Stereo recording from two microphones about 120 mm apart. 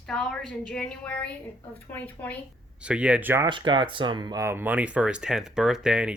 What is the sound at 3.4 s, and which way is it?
Speech, 40° right (ahead or behind).